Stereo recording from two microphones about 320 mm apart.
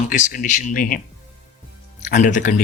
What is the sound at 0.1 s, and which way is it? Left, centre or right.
A man's voice, left.